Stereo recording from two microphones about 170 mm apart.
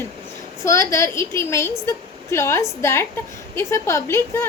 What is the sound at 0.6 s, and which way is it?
A woman's voice, 20° left (ahead or behind).